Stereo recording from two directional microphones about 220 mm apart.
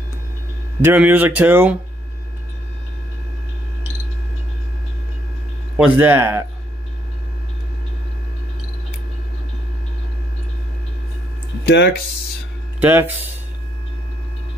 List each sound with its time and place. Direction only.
0.8 s speech: 10° right (ahead or behind)
5.8 s speech: 10° right (ahead or behind)
11.6 s speech: 50° left (ahead or behind)
12.8 s speech: 10° right (ahead or behind)